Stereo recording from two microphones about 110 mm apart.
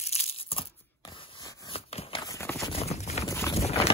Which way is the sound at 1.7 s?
60° left (ahead or behind).